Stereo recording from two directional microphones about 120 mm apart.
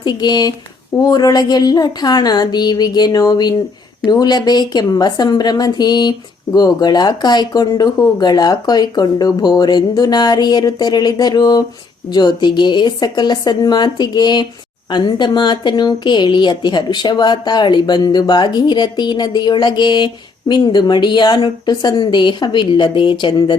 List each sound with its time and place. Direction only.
0.0 s a woman's voice: 35° left (ahead or behind)